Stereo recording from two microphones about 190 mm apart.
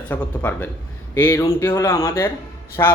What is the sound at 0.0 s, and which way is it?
A man's voice, 10° left (ahead or behind).